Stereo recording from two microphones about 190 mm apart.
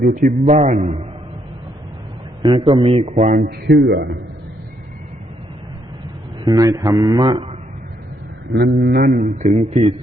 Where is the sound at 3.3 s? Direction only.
60° right (ahead or behind).